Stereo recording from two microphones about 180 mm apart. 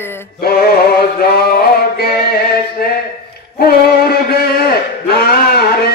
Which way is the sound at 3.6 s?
60° left (ahead or behind).